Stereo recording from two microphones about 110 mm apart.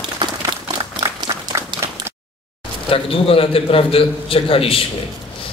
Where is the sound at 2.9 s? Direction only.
55° left (ahead or behind).